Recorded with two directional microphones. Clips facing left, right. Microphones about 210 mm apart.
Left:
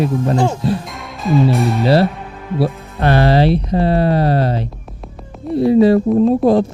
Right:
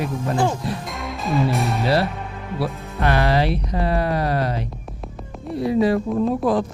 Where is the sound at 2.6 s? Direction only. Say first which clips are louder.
Left 5 dB; 30° left (ahead or behind).